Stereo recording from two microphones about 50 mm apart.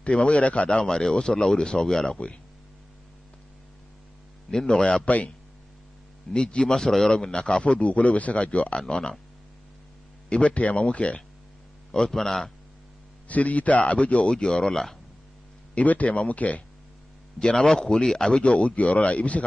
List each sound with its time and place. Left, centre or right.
0.0 s speech: left
0.8 s speech: centre
4.5 s speech: centre
6.3 s speech: centre
8.7 s speech: centre
10.3 s speech: left
11.9 s a man's voice: centre
13.3 s speech: left; by 15.0 s centre
15.7 s speech: left
17.6 s speech: centre; by 19.4 s left